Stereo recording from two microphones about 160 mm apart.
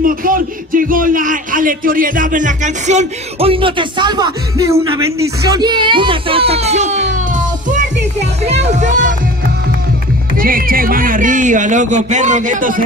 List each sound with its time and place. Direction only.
0.0 s a man's voice: 60° right (ahead or behind); by 7.1 s 45° right (ahead or behind)
8.7 s speech: 50° right (ahead or behind)
10.3 s speech: 65° right (ahead or behind)